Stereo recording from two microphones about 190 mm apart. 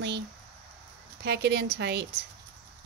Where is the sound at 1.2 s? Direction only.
65° right (ahead or behind).